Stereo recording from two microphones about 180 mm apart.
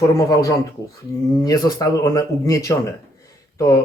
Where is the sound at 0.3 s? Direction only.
20° left (ahead or behind).